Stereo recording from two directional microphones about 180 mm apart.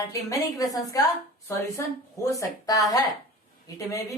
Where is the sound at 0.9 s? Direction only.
20° left (ahead or behind).